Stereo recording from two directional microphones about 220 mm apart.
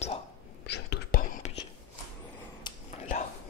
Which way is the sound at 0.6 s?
50° left (ahead or behind).